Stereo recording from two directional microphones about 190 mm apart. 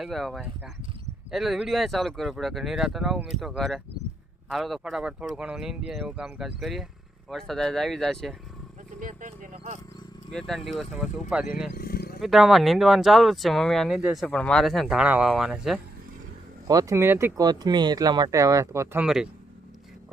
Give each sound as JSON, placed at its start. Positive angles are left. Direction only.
{"t": 0.0, "sound": "speech", "side_deg": 0}
{"t": 9.0, "sound": "speech", "side_deg": -45}
{"t": 10.3, "sound": "speech", "side_deg": 0}
{"t": 11.7, "sound": "a sound", "side_deg": 50}
{"t": 12.2, "sound": "speech", "side_deg": 0}
{"t": 16.6, "sound": "speech", "side_deg": -15}
{"t": 19.0, "sound": "speech", "side_deg": -5}